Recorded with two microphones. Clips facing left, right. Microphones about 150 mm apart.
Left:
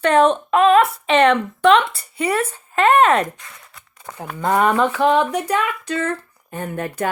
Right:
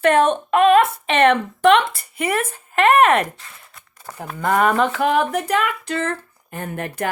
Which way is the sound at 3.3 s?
30° right (ahead or behind).